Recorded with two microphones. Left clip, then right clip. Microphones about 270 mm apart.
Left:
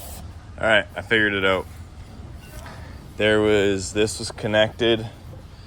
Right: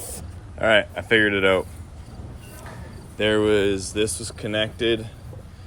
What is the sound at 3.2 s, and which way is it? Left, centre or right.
Speech, centre.